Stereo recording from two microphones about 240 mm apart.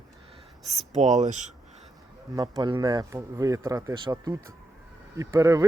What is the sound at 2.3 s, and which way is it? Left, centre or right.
Speech, centre.